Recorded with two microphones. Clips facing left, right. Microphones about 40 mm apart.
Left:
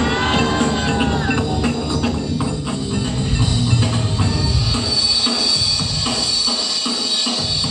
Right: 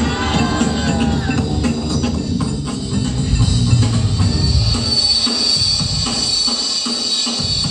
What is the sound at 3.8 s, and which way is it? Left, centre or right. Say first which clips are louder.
Music: right 1 dB; left.